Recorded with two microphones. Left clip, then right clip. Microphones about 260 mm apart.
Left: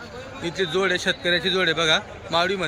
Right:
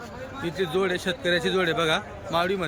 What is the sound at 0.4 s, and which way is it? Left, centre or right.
A man's voice, centre.